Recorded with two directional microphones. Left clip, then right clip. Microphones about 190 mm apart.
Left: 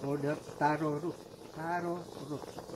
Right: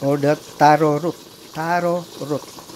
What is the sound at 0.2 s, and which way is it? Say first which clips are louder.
Speech: right 17 dB; 45° right (ahead or behind).